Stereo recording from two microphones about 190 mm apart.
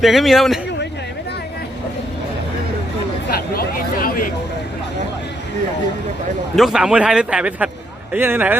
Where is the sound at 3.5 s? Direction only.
50° left (ahead or behind).